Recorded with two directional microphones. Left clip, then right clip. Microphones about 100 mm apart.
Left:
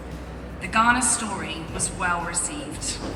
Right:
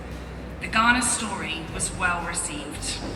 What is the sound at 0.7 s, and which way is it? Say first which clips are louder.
A woman's voice: left 1 dB; 20° left (ahead or behind).